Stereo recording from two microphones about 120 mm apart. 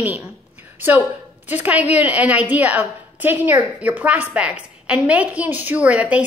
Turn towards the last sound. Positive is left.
turn(degrees=-10)  # may be behind; listen again after turning